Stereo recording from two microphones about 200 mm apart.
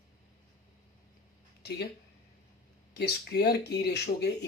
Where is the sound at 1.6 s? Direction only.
55° left (ahead or behind).